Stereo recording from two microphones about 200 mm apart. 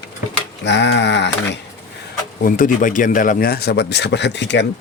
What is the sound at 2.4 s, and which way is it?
A man's voice, 45° left (ahead or behind).